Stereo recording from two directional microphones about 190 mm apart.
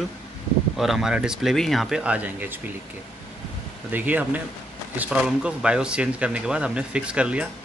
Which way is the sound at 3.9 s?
10° right (ahead or behind).